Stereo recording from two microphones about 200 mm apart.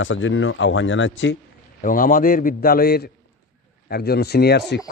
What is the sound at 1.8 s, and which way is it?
A man's voice, 45° left (ahead or behind).